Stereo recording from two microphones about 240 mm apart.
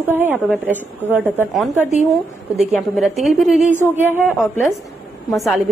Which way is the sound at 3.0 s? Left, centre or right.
Centre.